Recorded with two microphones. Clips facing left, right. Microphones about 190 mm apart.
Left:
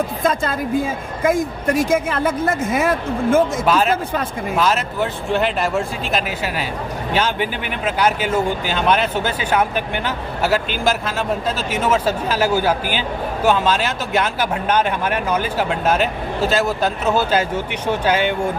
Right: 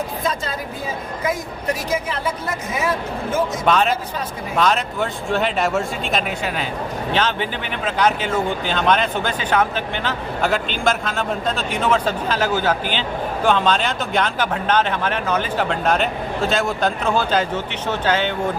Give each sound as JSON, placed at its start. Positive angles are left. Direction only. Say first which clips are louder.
{"t": 0.2, "sound": "speech", "louder": "left 5 dB", "side_deg": 50}
{"t": 3.7, "sound": "speech", "louder": "left 1 dB", "side_deg": 5}